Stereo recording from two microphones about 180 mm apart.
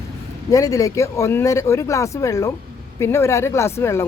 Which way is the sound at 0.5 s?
20° left (ahead or behind).